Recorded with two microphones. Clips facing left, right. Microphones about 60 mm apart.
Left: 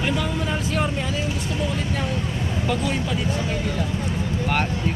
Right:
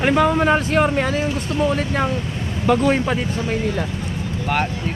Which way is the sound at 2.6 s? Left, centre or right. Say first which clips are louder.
Right 10 dB; right.